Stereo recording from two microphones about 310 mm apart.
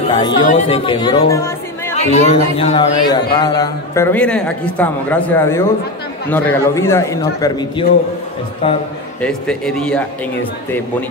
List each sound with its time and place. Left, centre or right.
0.1 s a man's voice: centre
2.1 s a man's voice: centre
9.2 s a man's voice: centre